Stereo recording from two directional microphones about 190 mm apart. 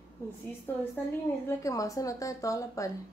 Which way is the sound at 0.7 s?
10° left (ahead or behind).